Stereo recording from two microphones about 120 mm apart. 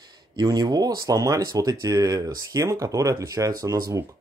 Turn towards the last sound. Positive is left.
turn(degrees=-30)  # may be behind; listen again after turning